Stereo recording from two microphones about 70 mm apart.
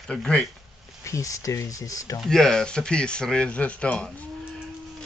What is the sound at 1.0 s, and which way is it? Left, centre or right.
Speech, left.